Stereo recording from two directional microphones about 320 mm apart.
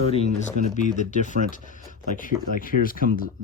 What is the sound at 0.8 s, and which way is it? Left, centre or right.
Speech, left.